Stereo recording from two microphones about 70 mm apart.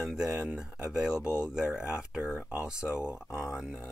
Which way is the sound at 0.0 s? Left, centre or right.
Centre.